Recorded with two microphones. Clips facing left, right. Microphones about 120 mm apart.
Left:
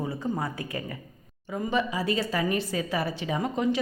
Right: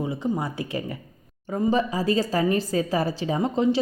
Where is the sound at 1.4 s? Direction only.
35° right (ahead or behind).